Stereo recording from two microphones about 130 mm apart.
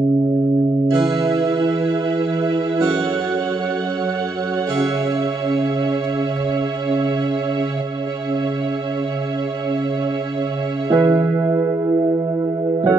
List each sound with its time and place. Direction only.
0.9 s music: 30° right (ahead or behind)
10.9 s music: 30° right (ahead or behind)